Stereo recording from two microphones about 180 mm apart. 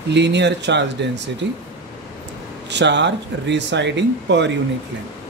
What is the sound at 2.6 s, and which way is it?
Speech, 75° right (ahead or behind).